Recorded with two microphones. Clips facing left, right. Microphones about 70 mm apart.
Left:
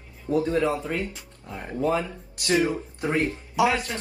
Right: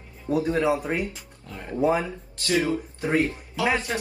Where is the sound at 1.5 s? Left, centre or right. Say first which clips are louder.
Even; left.